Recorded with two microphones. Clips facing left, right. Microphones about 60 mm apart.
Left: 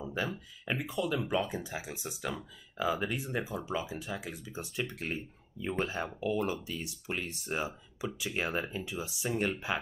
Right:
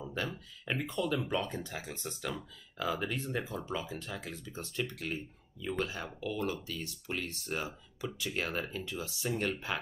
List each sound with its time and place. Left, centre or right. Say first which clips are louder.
0.0 s a sound: left 2 dB; centre
0.7 s speech: left 1 dB; centre
4.9 s speech: left 1 dB; left; by 9.8 s centre